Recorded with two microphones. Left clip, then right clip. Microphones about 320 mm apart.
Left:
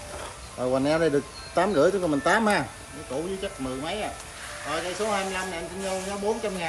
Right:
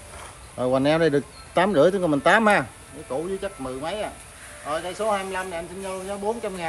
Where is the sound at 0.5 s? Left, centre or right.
Right.